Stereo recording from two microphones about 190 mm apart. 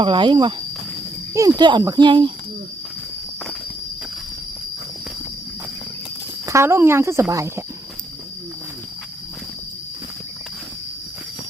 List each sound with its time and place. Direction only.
0.0 s speech: 25° right (ahead or behind)
6.4 s speech: 15° right (ahead or behind)